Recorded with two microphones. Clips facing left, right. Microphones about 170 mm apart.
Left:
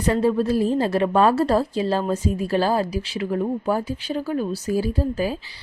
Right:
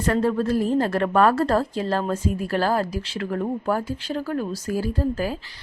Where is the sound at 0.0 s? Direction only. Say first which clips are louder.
Left 2 dB; 15° left (ahead or behind).